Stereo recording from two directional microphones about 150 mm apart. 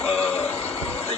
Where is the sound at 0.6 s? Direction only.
40° left (ahead or behind).